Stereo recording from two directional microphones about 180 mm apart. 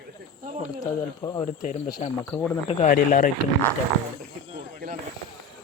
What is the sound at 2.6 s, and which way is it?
Speech, 35° left (ahead or behind).